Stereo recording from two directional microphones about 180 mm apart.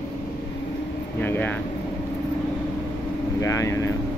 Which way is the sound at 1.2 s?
10° left (ahead or behind).